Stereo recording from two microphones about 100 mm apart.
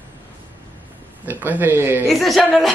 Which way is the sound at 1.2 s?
20° right (ahead or behind).